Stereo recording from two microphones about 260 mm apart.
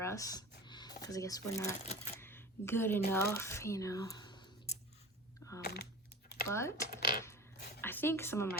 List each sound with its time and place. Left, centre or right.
0.0 s a sound: centre
1.0 s speech: centre
1.8 s speech: left
2.1 s speech: centre
5.6 s typing: left
6.5 s speech: centre
7.8 s speech: centre